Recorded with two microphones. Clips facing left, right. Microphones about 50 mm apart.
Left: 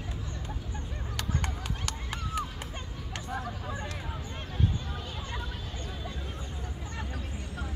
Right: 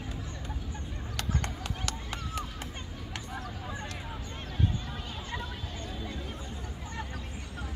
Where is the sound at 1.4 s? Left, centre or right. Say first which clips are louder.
Left 1 dB; centre.